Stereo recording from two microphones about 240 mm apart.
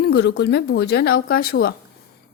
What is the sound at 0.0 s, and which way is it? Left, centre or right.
Speech, left.